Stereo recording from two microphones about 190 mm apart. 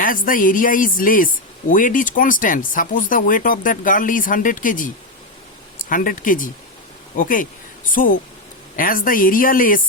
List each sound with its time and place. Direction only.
0.0 s speech: 45° left (ahead or behind)